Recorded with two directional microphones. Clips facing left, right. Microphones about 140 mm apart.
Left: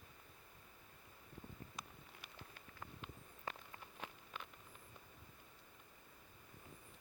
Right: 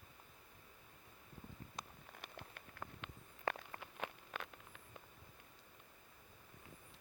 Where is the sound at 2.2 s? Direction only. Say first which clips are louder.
Right 6 dB; 65° right (ahead or behind).